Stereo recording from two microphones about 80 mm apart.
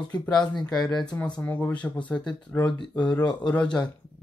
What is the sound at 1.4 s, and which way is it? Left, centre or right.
Speech, centre.